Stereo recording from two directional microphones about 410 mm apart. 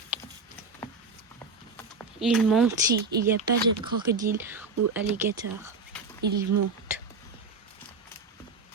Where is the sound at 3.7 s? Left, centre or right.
Centre.